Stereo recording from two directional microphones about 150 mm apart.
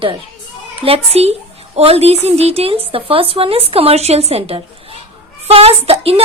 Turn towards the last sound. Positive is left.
turn(degrees=-40)  # may be behind; listen again after turning